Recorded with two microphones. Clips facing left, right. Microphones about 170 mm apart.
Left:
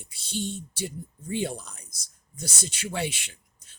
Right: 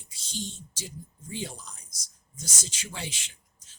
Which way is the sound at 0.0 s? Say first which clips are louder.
Left 6 dB; 60° left (ahead or behind).